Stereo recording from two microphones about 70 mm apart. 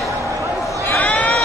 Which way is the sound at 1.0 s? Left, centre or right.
Centre.